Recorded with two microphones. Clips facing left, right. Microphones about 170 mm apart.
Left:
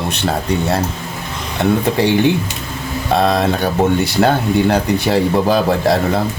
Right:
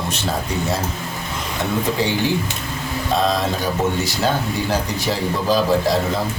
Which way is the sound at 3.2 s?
60° left (ahead or behind).